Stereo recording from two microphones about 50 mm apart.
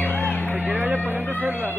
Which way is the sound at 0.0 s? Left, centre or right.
Left.